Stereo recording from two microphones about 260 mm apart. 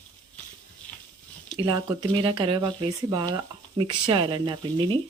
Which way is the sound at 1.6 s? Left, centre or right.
Centre.